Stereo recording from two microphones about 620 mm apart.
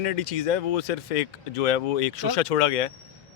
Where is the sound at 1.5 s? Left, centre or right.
Left.